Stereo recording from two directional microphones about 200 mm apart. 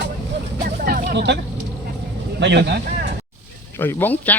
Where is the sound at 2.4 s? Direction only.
60° right (ahead or behind).